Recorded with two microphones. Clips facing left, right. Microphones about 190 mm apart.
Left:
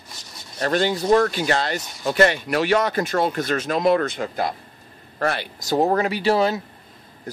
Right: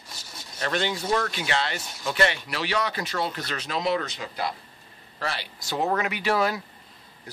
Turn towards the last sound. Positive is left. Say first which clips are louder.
# left 5 dB
turn(degrees=30)  # may be behind; listen again after turning